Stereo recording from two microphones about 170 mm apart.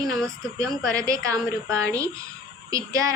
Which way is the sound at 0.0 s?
5° left (ahead or behind).